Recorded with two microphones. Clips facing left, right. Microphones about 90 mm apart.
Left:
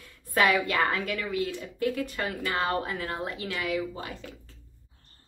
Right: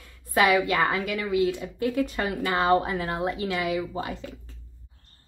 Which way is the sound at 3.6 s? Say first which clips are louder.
Right 3 dB; 35° right (ahead or behind).